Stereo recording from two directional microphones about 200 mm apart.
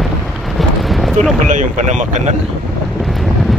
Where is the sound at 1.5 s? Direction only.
40° right (ahead or behind).